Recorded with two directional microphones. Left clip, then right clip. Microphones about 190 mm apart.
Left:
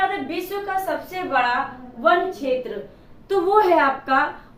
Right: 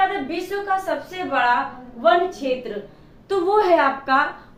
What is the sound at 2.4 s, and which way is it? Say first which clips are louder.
A woman's voice: left 1 dB; 5° left (ahead or behind).